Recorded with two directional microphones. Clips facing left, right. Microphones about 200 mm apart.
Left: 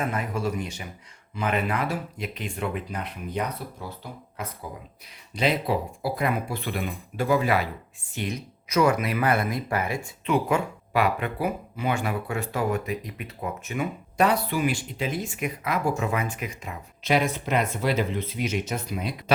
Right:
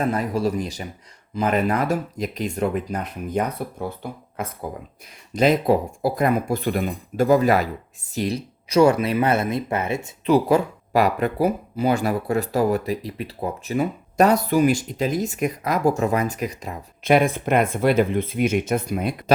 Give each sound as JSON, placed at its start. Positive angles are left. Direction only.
{"t": 0.0, "sound": "speech", "side_deg": -35}
{"t": 10.2, "sound": "speech", "side_deg": -35}
{"t": 17.0, "sound": "speech", "side_deg": -55}